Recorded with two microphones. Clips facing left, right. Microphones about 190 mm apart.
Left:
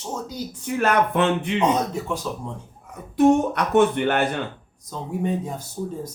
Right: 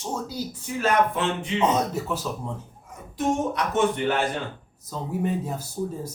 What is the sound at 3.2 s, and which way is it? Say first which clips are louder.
Speech: left 7 dB; 60° left (ahead or behind).